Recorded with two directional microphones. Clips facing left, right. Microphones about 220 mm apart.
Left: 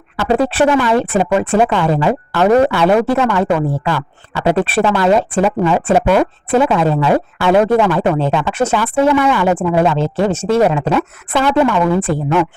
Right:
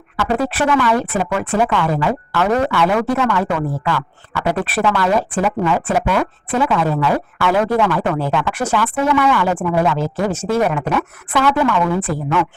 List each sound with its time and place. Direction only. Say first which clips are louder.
0.2 s speech: left 5 dB; 30° left (ahead or behind)